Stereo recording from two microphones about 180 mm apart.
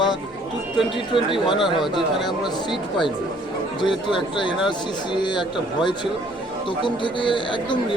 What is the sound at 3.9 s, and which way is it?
A man's voice, 25° left (ahead or behind).